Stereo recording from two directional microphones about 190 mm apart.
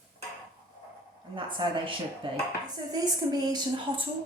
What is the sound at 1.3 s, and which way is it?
Speech, 25° right (ahead or behind).